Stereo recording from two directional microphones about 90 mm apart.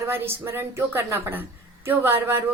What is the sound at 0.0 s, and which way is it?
A woman's voice, 25° right (ahead or behind).